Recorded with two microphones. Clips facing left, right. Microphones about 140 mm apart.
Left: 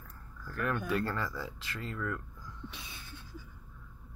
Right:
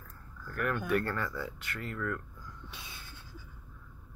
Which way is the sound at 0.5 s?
25° left (ahead or behind).